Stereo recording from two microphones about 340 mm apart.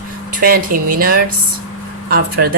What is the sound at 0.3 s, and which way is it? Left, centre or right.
Speech, right.